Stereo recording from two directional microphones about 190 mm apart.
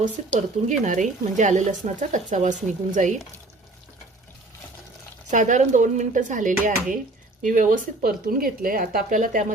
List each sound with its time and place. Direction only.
0.0 s speech: 40° right (ahead or behind)
5.3 s speech: 40° right (ahead or behind)